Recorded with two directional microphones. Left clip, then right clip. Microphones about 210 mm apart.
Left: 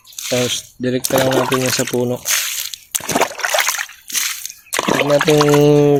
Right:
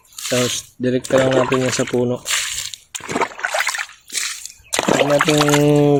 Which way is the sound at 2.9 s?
40° left (ahead or behind).